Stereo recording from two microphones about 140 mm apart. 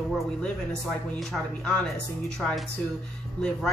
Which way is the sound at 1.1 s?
5° left (ahead or behind).